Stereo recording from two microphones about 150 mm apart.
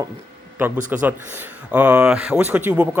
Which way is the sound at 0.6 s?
10° right (ahead or behind).